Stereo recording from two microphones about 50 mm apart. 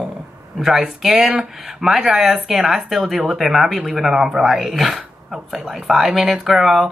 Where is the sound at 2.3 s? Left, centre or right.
Right.